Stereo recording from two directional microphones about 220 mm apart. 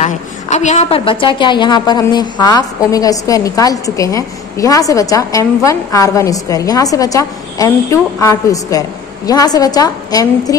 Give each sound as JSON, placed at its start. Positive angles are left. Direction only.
{"t": 0.0, "sound": "a woman's voice", "side_deg": 30}